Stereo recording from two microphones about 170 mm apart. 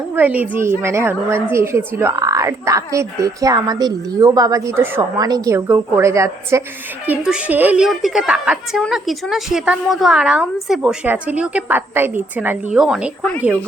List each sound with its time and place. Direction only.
0.2 s a woman's voice: 10° right (ahead or behind)